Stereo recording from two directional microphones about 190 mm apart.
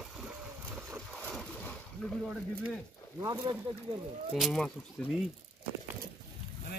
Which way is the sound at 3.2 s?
20° right (ahead or behind).